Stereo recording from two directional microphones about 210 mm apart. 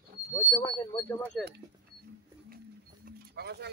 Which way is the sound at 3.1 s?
50° right (ahead or behind).